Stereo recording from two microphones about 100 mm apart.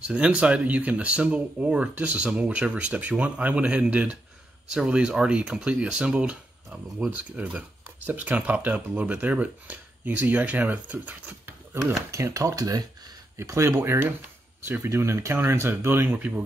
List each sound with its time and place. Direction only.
0.0 s speech: 10° right (ahead or behind)
11.9 s speech: 30° right (ahead or behind); by 16.4 s 15° right (ahead or behind)